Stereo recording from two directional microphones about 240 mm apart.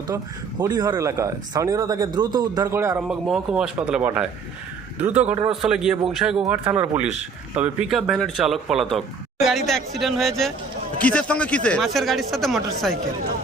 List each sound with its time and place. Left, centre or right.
0.6 s speech: centre